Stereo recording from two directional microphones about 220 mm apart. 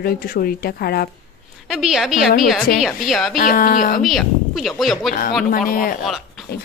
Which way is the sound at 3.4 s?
40° left (ahead or behind).